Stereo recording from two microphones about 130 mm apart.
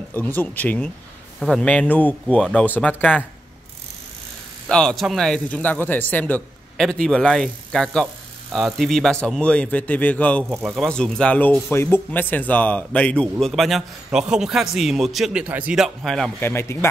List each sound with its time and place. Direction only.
0.1 s a man's voice: 15° left (ahead or behind)
4.6 s a man's voice: 5° left (ahead or behind)
16.3 s speech: 20° left (ahead or behind)